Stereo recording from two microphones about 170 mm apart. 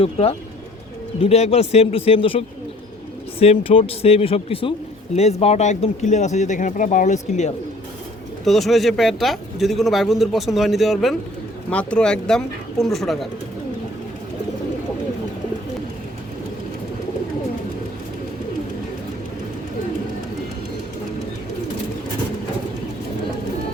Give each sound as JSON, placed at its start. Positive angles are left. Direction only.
{"t": 0.0, "sound": "speech", "side_deg": 35}
{"t": 8.4, "sound": "speech", "side_deg": 0}